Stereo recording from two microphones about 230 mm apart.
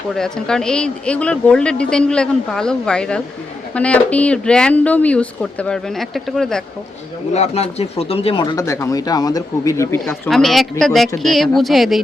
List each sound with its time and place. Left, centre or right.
0.1 s speech: centre
7.3 s speech: left
10.0 s speech: centre